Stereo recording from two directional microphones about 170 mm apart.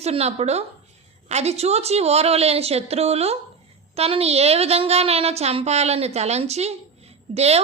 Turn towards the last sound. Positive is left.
turn(degrees=-40)  # may be behind; listen again after turning